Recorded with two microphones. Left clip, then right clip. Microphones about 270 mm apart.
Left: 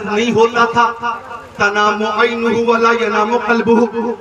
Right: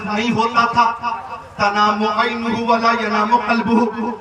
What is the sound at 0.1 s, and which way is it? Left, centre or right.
A man's voice, centre.